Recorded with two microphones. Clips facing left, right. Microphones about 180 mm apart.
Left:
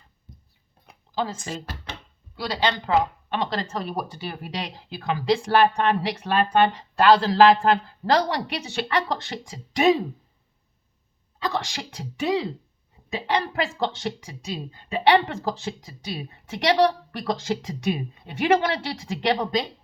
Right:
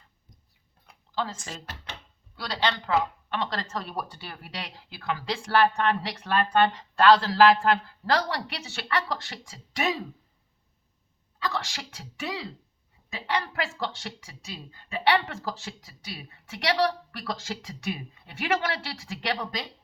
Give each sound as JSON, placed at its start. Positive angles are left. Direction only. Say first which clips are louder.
{"t": 0.9, "sound": "a sound", "louder": "left 4 dB", "side_deg": 15}
{"t": 2.3, "sound": "speech", "louder": "left 4 dB", "side_deg": 15}
{"t": 11.3, "sound": "speech", "louder": "left 4 dB", "side_deg": 20}